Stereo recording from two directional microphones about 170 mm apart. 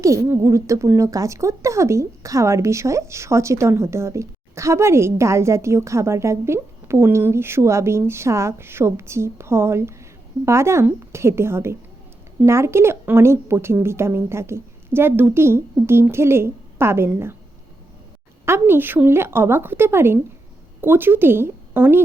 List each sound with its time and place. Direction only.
0.0 s a woman's voice: 20° right (ahead or behind)
18.4 s a woman's voice: 15° right (ahead or behind)